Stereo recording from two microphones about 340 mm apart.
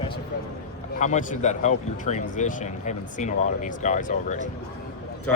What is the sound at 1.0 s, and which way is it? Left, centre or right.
Speech, left.